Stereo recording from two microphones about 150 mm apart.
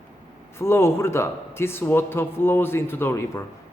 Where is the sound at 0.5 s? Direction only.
15° left (ahead or behind).